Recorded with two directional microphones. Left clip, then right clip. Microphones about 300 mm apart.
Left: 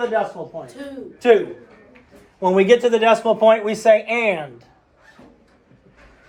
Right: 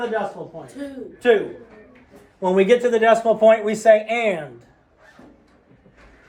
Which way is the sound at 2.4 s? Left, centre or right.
Centre.